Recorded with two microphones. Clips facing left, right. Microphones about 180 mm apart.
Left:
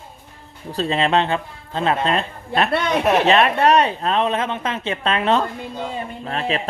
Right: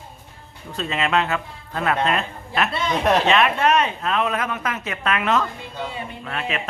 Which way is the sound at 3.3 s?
35° left (ahead or behind).